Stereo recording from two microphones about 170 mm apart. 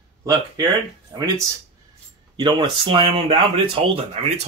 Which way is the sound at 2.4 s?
25° right (ahead or behind).